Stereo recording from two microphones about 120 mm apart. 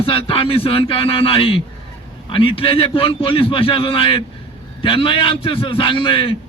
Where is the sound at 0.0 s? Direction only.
50° left (ahead or behind).